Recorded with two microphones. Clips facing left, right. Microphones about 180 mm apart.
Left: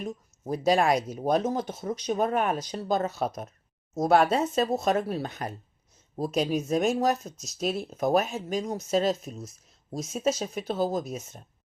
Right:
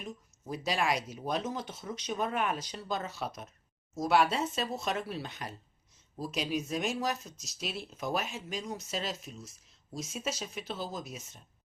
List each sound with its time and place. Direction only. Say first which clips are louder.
0.0 s speech: left 8 dB; 45° left (ahead or behind)